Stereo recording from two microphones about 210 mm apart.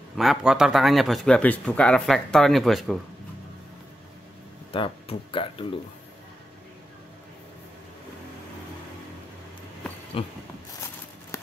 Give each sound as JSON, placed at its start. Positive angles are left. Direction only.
{"t": 0.1, "sound": "a man's voice", "side_deg": 0}
{"t": 4.7, "sound": "speech", "side_deg": 25}
{"t": 10.1, "sound": "speech", "side_deg": 25}
{"t": 11.3, "sound": "a sound", "side_deg": 15}